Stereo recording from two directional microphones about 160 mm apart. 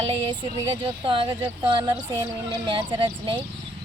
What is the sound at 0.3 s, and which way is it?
Speech, 30° right (ahead or behind).